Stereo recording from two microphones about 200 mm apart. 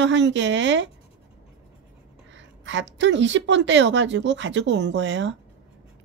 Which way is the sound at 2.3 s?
65° right (ahead or behind).